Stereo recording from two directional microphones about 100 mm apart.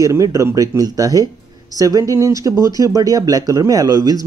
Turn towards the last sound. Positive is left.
turn(degrees=-40)  # may be behind; listen again after turning